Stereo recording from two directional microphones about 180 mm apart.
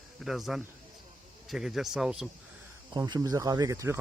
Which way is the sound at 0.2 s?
Centre (ahead or behind).